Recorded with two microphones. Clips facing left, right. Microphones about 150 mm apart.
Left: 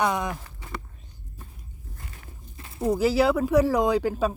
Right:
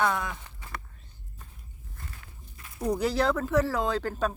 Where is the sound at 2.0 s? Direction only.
25° left (ahead or behind).